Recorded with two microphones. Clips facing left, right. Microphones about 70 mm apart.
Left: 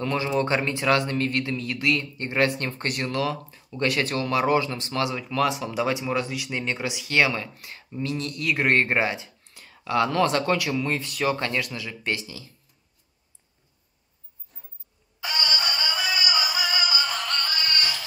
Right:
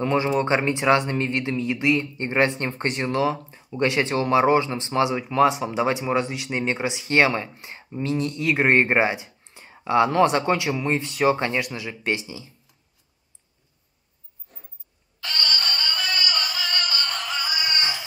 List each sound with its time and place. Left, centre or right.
0.0 s speech: right
14.5 s a sound: right
15.1 s music: centre; by 18.0 s right